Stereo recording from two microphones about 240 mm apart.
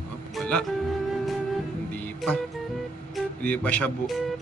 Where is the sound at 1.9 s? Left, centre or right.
Centre.